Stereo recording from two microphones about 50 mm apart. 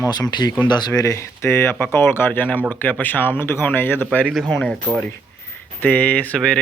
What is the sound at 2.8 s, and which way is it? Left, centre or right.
Speech, left.